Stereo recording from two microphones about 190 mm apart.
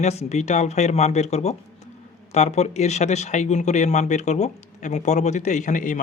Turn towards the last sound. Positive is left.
turn(degrees=45)  # may be behind; listen again after turning